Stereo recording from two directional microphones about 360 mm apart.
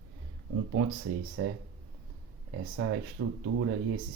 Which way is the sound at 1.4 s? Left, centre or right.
Right.